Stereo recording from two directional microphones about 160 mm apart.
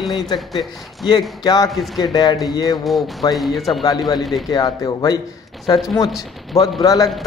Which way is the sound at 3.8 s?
25° left (ahead or behind).